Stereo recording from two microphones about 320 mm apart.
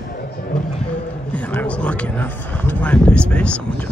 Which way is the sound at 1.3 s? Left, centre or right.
Centre.